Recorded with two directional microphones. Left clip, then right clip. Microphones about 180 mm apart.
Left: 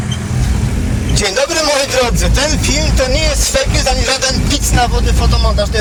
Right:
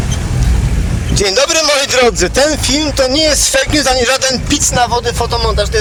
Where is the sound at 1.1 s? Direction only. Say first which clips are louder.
Right 3 dB; 65° right (ahead or behind).